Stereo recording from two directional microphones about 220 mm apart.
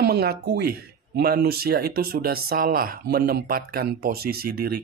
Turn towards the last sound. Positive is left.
turn(degrees=-45)  # may be behind; listen again after turning